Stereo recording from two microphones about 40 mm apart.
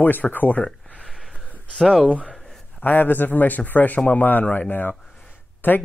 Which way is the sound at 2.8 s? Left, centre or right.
Left.